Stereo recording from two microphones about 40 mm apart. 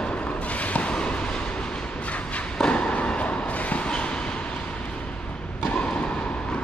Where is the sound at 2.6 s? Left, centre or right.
Left.